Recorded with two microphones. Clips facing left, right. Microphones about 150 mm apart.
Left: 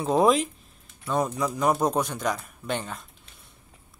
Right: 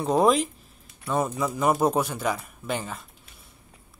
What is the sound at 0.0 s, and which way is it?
Speech, centre (ahead or behind).